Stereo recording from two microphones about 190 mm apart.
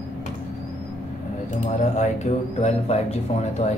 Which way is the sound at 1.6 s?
35° left (ahead or behind).